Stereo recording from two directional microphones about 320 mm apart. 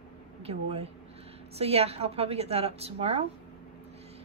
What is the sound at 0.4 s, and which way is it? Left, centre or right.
A woman's voice, centre.